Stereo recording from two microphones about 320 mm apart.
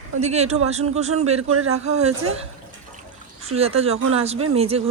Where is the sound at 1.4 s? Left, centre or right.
Right.